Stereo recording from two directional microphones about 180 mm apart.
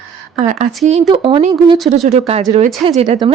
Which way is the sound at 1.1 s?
25° right (ahead or behind).